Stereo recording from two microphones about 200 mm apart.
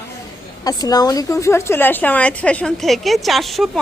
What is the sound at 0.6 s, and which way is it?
A woman's voice, 20° left (ahead or behind).